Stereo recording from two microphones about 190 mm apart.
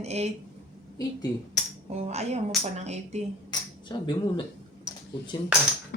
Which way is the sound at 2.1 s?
35° right (ahead or behind).